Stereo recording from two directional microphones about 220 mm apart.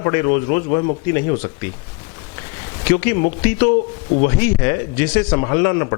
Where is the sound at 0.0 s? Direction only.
15° left (ahead or behind).